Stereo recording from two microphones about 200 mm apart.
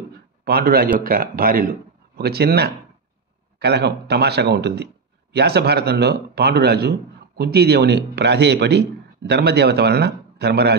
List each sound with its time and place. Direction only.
0.5 s a man's voice: 50° right (ahead or behind)